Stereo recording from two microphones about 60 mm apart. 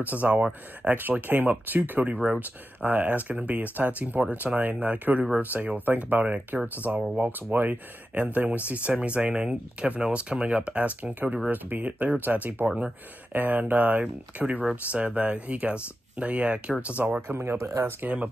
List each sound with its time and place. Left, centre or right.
0.1 s speech: right
2.1 s speech: centre
2.8 s speech: right
17.3 s speech: right
17.6 s speech: right
18.0 s speech: right